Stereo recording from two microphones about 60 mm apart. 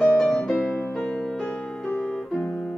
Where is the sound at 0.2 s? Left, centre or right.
Centre.